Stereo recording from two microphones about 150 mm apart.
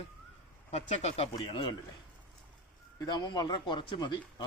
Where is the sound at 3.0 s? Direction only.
30° left (ahead or behind).